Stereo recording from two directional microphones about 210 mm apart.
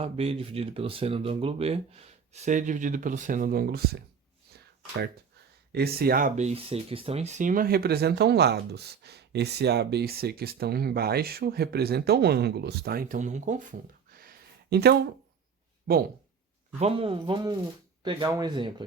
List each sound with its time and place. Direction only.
0.0 s speech: 30° right (ahead or behind); by 3.8 s 45° right (ahead or behind)
5.7 s speech: 50° right (ahead or behind)
16.8 s speech: 25° right (ahead or behind)